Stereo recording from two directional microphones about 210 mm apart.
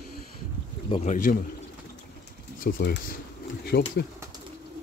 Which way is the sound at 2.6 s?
45° left (ahead or behind).